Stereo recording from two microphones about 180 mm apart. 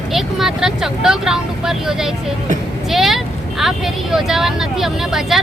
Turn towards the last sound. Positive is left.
turn(degrees=0)  # may be behind; listen again after turning